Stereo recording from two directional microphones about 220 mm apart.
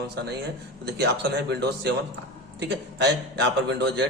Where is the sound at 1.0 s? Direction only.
50° right (ahead or behind).